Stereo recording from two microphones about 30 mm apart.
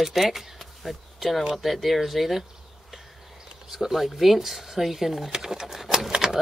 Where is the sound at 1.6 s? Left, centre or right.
Centre.